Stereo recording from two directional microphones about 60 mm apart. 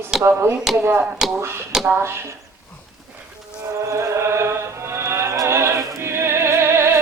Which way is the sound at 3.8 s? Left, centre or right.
Right.